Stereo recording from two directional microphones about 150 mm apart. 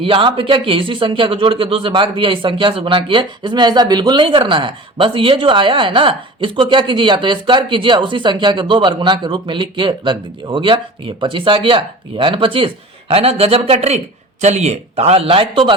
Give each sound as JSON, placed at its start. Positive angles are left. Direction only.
{"t": 0.0, "sound": "a man's voice", "side_deg": -35}